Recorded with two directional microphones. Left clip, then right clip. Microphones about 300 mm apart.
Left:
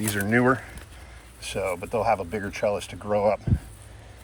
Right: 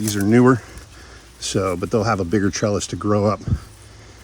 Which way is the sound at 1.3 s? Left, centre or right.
Right.